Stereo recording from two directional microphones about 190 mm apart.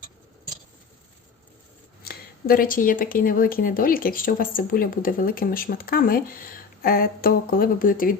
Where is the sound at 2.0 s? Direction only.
50° left (ahead or behind).